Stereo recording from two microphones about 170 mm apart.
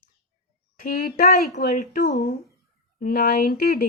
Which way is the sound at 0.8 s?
55° left (ahead or behind).